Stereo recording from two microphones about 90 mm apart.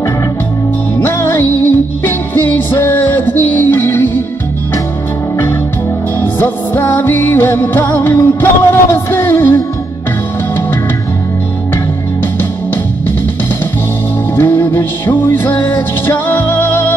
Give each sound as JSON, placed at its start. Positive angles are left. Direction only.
{"t": 0.9, "sound": "music", "side_deg": 30}
{"t": 6.1, "sound": "music", "side_deg": 25}
{"t": 12.2, "sound": "music", "side_deg": 25}
{"t": 14.3, "sound": "music", "side_deg": 25}